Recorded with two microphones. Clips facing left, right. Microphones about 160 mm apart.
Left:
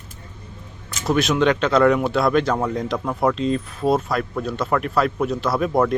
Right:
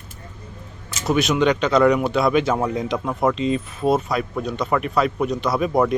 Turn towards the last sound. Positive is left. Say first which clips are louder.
# even
turn(degrees=0)  # may be behind; listen again after turning